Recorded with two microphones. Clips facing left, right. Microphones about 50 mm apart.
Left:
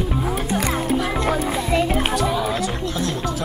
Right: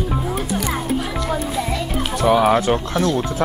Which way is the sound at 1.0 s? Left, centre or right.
Left.